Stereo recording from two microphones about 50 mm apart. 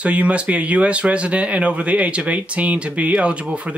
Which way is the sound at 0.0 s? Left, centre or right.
Right.